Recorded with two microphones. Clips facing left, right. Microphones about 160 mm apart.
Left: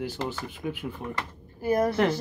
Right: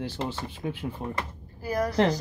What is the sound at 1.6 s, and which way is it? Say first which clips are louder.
Speech: left 4 dB; 25° left (ahead or behind).